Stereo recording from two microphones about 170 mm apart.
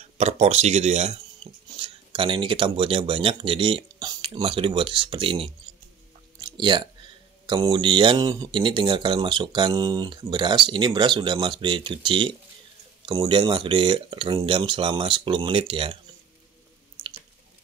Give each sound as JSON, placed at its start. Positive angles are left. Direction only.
{"t": 0.0, "sound": "speech", "side_deg": -40}
{"t": 6.4, "sound": "a sound", "side_deg": -25}
{"t": 7.4, "sound": "speech", "side_deg": -25}